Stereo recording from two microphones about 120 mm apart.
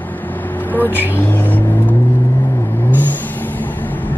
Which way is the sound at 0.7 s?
15° left (ahead or behind).